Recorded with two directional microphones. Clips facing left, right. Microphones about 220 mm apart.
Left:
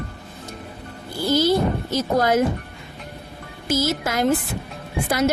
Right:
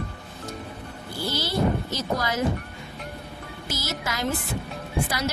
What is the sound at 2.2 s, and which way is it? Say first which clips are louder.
Speech: left 9 dB; 50° left (ahead or behind).